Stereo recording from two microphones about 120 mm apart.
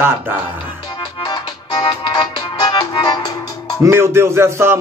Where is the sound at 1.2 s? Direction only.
35° left (ahead or behind).